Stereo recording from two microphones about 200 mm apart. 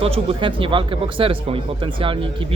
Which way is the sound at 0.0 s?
25° right (ahead or behind).